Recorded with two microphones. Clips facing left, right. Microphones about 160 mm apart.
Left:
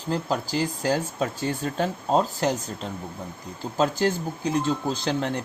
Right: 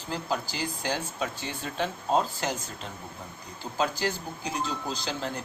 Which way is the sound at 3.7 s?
50° left (ahead or behind).